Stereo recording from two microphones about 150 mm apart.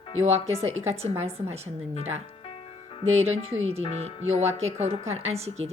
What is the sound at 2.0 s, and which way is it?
Speech, 45° right (ahead or behind).